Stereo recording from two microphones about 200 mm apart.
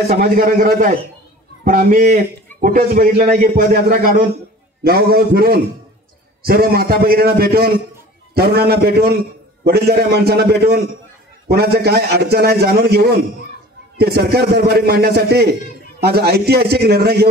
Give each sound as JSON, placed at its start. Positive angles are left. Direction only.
{"t": 0.2, "sound": "a man's voice", "side_deg": -45}